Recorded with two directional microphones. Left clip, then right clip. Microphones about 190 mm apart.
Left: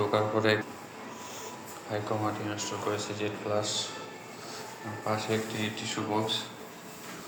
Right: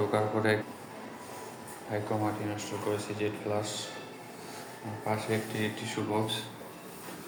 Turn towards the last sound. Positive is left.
turn(degrees=-20)  # may be behind; listen again after turning